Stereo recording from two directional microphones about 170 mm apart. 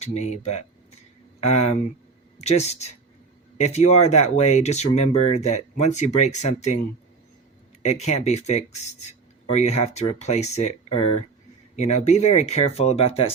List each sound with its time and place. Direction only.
0.0 s speech: 40° left (ahead or behind)
7.8 s speech: 40° left (ahead or behind)